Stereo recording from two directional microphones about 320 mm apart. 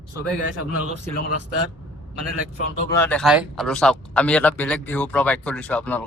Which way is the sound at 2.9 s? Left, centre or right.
Centre.